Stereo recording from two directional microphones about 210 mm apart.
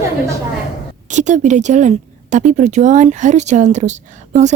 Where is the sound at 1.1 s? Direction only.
35° right (ahead or behind).